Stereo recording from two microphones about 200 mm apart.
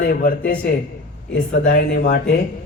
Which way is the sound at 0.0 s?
45° left (ahead or behind).